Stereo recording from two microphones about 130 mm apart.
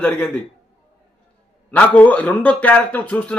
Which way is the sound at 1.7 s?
10° left (ahead or behind).